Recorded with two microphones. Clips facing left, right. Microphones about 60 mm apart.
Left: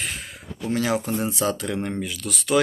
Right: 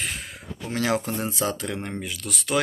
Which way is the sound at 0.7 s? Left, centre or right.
Right.